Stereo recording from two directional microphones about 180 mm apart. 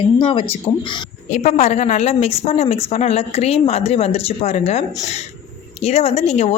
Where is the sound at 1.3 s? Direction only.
40° left (ahead or behind).